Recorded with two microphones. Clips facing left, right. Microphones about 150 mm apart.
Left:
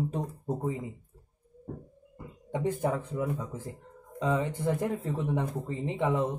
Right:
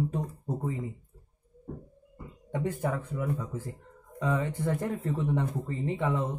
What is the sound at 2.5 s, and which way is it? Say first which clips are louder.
Speech: left 2 dB; 20° left (ahead or behind).